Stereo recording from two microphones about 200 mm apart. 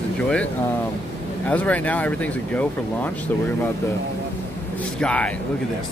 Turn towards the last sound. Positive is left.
turn(degrees=5)  # may be behind; listen again after turning